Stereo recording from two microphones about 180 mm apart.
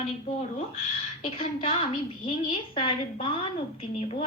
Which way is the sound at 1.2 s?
30° left (ahead or behind).